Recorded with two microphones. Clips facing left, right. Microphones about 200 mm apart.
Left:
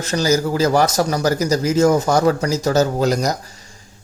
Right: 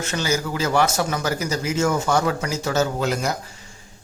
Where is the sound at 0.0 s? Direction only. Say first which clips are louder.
Left 6 dB; 40° left (ahead or behind).